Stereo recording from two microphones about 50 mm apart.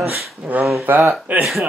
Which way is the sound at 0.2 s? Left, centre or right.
Centre.